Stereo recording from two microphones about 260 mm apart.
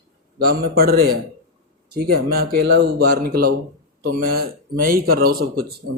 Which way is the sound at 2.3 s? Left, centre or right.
Right.